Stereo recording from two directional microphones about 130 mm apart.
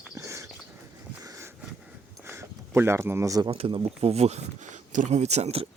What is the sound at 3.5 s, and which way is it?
Speech, 45° right (ahead or behind).